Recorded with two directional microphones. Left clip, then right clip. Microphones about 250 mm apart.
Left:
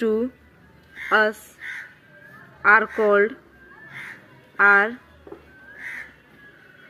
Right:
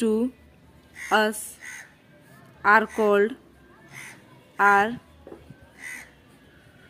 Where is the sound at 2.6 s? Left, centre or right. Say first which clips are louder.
Left 3 dB; centre.